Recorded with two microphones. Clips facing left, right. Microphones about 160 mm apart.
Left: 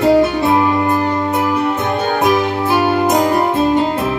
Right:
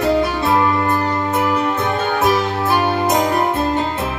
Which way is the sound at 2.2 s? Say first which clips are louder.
Left 2 dB; 10° left (ahead or behind).